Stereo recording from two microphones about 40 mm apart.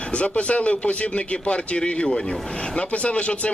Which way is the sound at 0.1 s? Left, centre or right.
Left.